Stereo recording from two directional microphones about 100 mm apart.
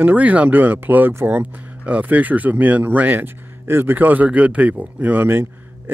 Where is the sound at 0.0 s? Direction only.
15° right (ahead or behind).